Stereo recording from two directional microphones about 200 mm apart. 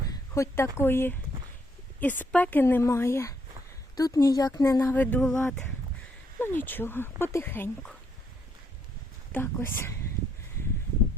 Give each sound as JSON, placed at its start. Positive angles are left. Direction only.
{"t": 0.3, "sound": "speech", "side_deg": 10}
{"t": 9.3, "sound": "speech", "side_deg": 10}